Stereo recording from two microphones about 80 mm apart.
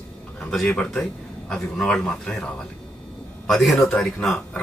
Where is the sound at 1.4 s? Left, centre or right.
Centre.